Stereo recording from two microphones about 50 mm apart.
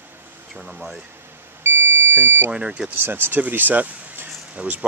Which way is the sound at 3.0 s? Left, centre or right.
Right.